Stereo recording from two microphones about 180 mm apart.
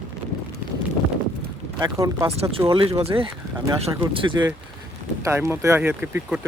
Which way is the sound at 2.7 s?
30° right (ahead or behind).